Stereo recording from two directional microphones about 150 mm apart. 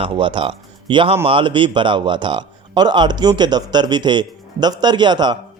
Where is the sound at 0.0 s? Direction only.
35° right (ahead or behind).